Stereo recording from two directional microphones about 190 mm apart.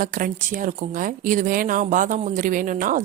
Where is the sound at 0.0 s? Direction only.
45° right (ahead or behind).